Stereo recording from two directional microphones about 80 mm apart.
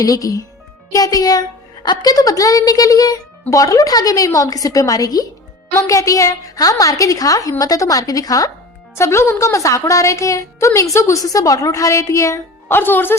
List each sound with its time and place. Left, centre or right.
0.0 s a woman's voice: left
9.0 s a woman's voice: left
12.6 s speech: left